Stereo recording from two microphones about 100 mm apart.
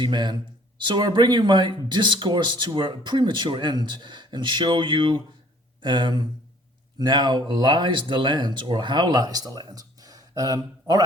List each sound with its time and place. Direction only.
0.0 s speech: 50° right (ahead or behind)